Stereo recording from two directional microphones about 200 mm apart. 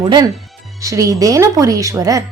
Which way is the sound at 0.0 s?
20° right (ahead or behind).